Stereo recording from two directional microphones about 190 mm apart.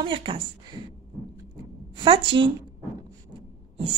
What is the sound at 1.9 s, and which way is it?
Speech, 25° right (ahead or behind).